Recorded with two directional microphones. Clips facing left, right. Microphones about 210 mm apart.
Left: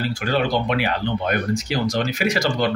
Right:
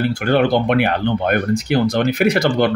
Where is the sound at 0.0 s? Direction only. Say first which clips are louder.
Right 6 dB; 60° right (ahead or behind).